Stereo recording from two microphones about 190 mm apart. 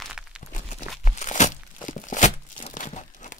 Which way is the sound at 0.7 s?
40° left (ahead or behind).